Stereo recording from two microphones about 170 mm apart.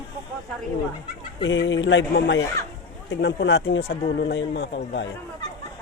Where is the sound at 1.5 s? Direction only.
90° left.